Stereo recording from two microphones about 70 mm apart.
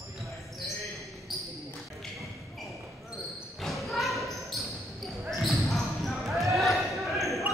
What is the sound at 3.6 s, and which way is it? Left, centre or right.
Basketball bounce, centre.